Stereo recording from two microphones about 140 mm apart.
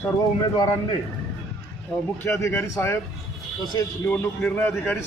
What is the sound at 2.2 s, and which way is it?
Speech, 20° left (ahead or behind).